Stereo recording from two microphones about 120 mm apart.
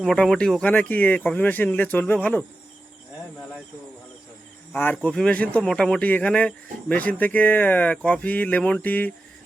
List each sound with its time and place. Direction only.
0.0 s speech: centre (ahead or behind)
4.7 s cricket: 15° left (ahead or behind)
5.0 s speech: 10° left (ahead or behind)